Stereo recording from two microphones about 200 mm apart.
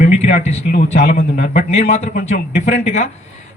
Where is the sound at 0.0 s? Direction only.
35° left (ahead or behind).